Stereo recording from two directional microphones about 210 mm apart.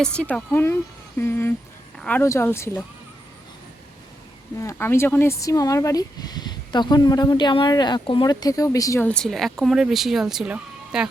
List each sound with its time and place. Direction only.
0.0 s speech: 5° left (ahead or behind)
4.6 s speech: 10° left (ahead or behind); by 11.1 s 5° right (ahead or behind)